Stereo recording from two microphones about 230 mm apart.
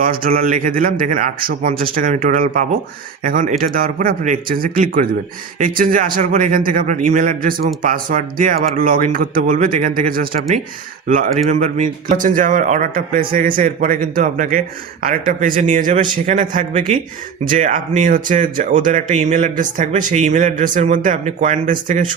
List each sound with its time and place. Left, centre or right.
0.0 s speech: right
11.5 s speech: right